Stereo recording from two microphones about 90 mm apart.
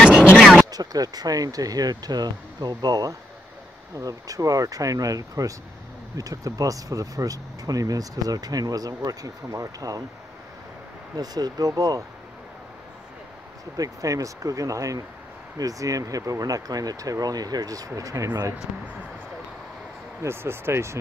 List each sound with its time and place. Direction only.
0.7 s speech: 45° right (ahead or behind)
11.1 s speech: 45° right (ahead or behind)
13.7 s speech: 40° right (ahead or behind)
20.2 s speech: 25° right (ahead or behind)